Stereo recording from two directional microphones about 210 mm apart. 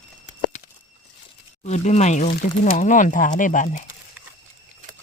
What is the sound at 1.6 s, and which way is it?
Speech, 35° left (ahead or behind).